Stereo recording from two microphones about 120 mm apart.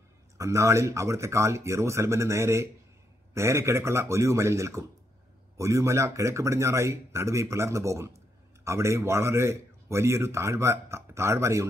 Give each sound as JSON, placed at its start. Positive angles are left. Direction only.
{"t": 0.4, "sound": "speech", "side_deg": -25}